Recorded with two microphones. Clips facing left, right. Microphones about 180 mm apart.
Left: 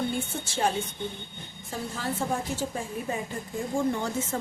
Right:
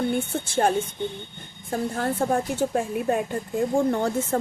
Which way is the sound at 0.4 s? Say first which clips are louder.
Right 5 dB; 50° right (ahead or behind).